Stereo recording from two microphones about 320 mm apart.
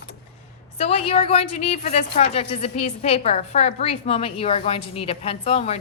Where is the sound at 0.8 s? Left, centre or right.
Centre.